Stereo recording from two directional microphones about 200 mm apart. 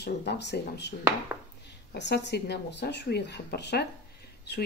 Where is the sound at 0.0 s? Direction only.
55° left (ahead or behind).